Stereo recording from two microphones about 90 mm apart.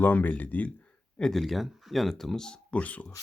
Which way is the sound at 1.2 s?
5° left (ahead or behind).